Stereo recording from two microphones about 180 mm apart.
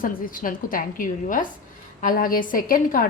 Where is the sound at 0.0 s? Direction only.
50° left (ahead or behind).